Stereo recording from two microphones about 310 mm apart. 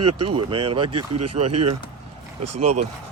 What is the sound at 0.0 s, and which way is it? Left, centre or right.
Speech, right.